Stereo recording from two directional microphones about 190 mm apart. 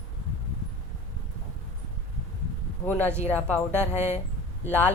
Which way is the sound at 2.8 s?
10° left (ahead or behind).